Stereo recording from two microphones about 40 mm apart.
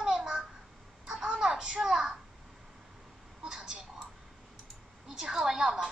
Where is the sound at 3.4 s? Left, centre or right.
Centre.